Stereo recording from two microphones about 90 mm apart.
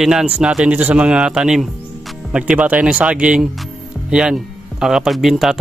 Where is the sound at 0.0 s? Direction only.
10° right (ahead or behind).